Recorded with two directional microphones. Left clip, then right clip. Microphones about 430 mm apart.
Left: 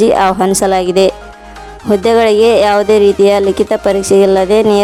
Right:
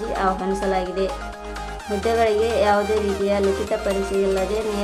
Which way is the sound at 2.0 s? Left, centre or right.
Left.